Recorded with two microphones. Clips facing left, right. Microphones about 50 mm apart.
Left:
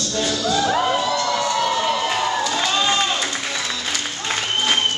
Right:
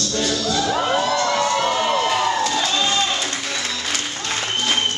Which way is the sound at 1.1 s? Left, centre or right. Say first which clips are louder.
Right 2 dB; right.